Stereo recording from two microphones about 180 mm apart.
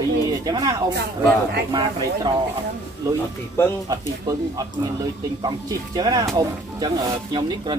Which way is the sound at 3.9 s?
20° right (ahead or behind).